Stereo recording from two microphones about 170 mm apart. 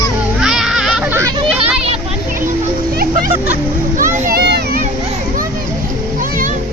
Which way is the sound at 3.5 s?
50° right (ahead or behind).